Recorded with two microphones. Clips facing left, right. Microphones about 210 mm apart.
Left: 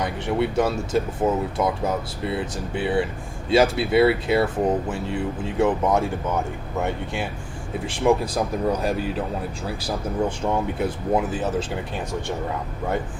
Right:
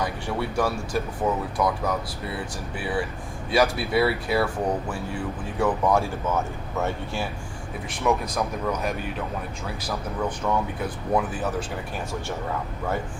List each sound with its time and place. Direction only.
0.0 s speech: 20° left (ahead or behind)
7.9 s speech: 30° left (ahead or behind)